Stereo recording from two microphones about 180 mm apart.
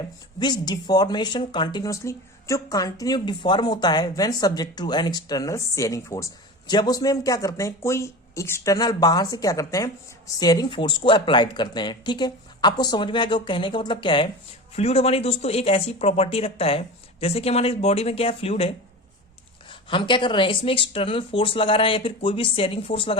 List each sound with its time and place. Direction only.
0.3 s speech: 25° left (ahead or behind)